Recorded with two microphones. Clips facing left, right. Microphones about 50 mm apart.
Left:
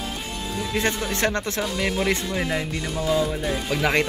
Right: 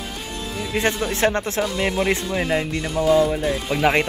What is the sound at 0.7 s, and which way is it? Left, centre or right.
Speech, centre.